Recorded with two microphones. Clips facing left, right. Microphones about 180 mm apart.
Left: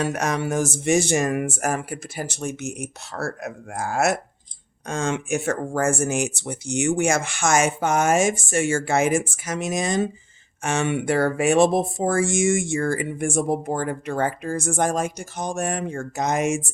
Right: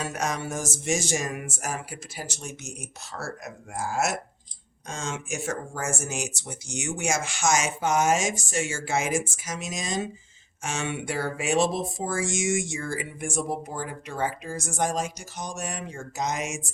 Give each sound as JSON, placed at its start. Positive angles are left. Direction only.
{"t": 0.0, "sound": "speech", "side_deg": 60}